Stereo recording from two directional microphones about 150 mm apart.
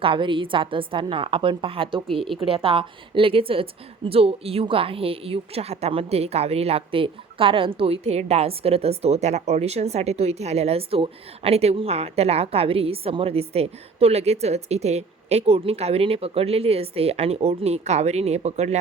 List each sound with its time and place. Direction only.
0.0 s a woman's voice: 35° right (ahead or behind)